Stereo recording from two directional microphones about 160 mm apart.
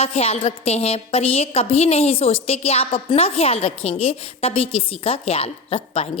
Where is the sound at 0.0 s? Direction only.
40° left (ahead or behind).